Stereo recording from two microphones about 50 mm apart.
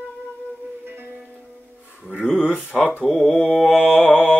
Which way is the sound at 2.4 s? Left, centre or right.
Left.